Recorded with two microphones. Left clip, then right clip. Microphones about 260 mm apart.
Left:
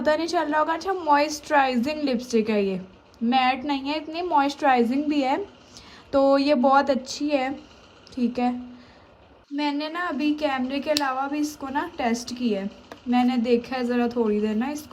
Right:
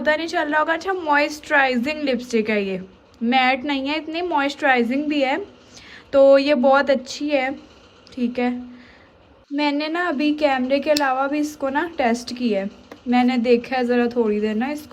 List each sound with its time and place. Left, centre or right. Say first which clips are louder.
0.0 s a woman's voice: right 2 dB; centre
9.6 s a woman's voice: right 5 dB; centre